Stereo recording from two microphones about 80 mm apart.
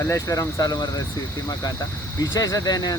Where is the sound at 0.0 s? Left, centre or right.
Left.